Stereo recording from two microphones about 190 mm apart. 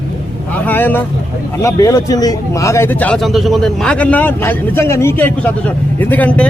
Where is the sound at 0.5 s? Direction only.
10° left (ahead or behind).